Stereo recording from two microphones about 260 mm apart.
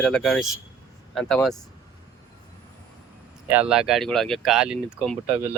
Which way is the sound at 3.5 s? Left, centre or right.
Centre.